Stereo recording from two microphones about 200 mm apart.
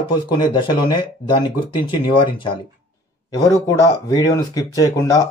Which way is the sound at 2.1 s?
25° left (ahead or behind).